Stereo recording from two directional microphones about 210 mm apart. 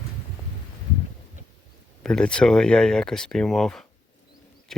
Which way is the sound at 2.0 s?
5° left (ahead or behind).